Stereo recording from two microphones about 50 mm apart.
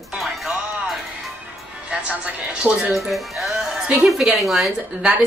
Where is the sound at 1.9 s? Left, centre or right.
Right.